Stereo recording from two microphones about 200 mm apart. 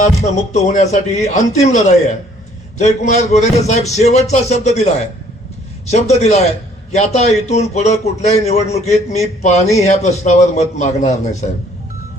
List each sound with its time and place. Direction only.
0.0 s a man's voice: 35° left (ahead or behind)